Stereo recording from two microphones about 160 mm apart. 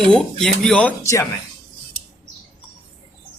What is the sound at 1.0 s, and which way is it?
Speech, 20° left (ahead or behind).